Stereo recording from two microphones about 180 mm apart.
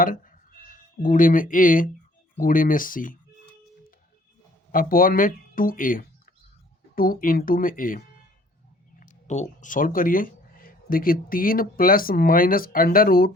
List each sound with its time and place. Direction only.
0.0 s a sound: 50° left (ahead or behind)
2.4 s speech: 50° left (ahead or behind)
4.7 s speech: 50° left (ahead or behind)